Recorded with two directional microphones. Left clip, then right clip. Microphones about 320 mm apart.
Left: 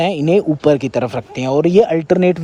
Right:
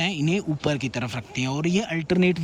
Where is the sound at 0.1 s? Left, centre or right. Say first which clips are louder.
Left 12 dB; centre.